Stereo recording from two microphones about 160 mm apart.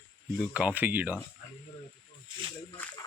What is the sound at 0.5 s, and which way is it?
Speech, 10° right (ahead or behind).